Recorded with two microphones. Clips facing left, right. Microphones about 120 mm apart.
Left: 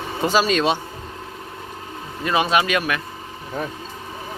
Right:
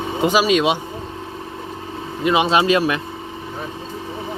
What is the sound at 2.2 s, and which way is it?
Speech, 20° right (ahead or behind).